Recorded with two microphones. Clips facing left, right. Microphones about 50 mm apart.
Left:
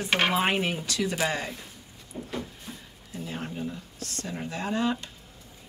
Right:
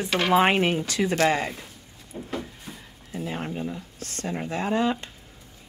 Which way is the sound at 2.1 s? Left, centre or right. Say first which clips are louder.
Right 1 dB; right.